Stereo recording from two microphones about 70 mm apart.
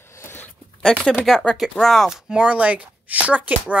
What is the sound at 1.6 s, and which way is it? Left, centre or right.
Speech, centre.